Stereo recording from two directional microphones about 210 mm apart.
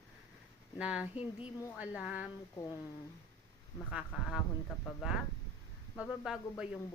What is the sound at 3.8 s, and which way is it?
Speech, 5° right (ahead or behind).